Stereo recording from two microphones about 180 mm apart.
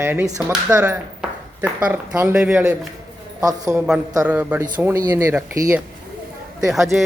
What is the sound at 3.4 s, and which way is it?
Speech, 20° right (ahead or behind).